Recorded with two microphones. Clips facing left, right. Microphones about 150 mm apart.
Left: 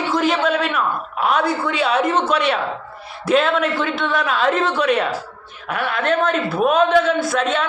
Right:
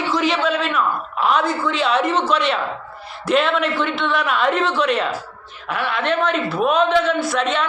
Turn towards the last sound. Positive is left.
turn(degrees=50)  # may be behind; listen again after turning